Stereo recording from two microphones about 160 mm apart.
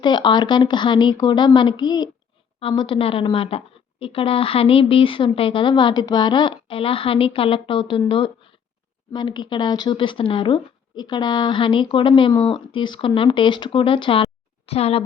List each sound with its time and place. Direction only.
0.0 s speech: 30° left (ahead or behind)